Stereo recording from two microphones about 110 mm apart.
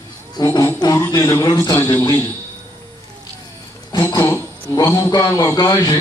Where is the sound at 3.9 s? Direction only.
35° left (ahead or behind).